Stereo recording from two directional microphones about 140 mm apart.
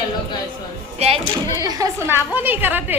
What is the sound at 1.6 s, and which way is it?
A woman's voice, 25° right (ahead or behind).